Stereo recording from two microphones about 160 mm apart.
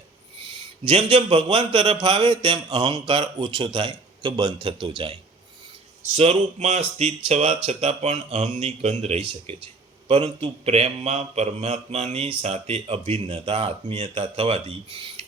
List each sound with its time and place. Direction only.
0.9 s a man's voice: 35° right (ahead or behind)
6.0 s a man's voice: 45° right (ahead or behind)